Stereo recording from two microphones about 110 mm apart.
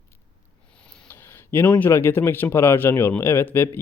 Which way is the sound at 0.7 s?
10° left (ahead or behind).